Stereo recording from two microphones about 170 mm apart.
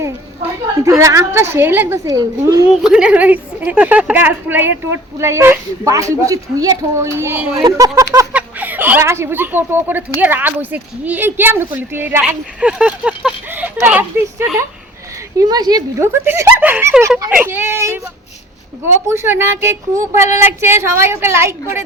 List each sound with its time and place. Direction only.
0.9 s a woman's voice: 20° right (ahead or behind)
2.8 s a woman's voice: 5° right (ahead or behind); by 8.0 s 20° right (ahead or behind)
8.3 s a woman's voice: 10° right (ahead or behind)
15.4 s a woman's voice: 25° right (ahead or behind)
19.0 s a woman's voice: 15° right (ahead or behind)